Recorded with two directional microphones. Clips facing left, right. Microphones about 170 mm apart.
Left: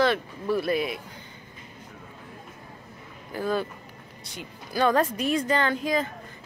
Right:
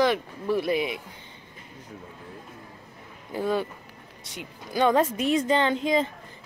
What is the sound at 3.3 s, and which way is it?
Speech, 15° right (ahead or behind).